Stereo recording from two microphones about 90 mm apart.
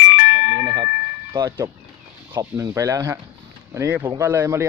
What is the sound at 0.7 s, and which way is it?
Speech, 55° right (ahead or behind).